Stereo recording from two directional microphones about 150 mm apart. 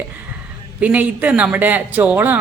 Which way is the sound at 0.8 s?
10° right (ahead or behind).